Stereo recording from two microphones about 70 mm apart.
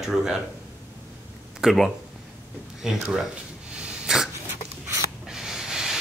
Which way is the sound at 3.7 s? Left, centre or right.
Centre.